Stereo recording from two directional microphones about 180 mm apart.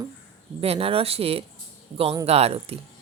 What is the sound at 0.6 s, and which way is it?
Speech, 30° right (ahead or behind).